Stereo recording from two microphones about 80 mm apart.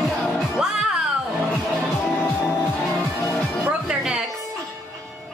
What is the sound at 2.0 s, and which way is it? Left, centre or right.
Music, left.